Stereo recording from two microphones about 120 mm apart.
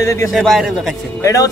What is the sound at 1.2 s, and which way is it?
Speech, 25° left (ahead or behind).